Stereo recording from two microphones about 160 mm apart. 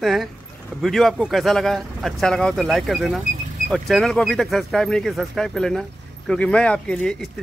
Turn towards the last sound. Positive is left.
turn(degrees=5)  # may be behind; listen again after turning